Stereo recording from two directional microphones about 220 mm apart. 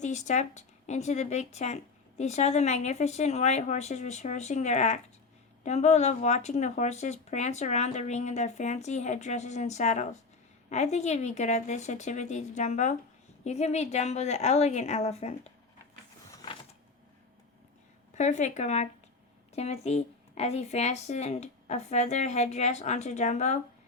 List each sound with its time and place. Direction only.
0.0 s a woman's voice: 30° left (ahead or behind)
18.1 s speech: 35° left (ahead or behind)